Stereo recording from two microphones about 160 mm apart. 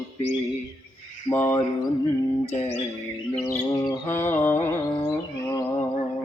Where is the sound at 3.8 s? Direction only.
25° left (ahead or behind).